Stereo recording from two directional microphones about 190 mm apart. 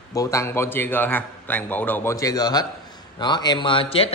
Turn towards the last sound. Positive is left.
turn(degrees=30)  # may be behind; listen again after turning